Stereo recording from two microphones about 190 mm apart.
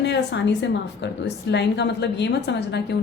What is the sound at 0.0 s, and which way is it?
A woman's voice, 65° left (ahead or behind).